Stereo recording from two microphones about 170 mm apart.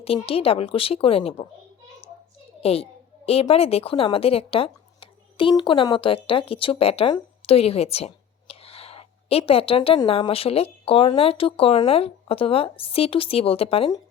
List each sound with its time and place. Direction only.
0.2 s speech: 35° left (ahead or behind)
2.6 s a woman's voice: 35° left (ahead or behind)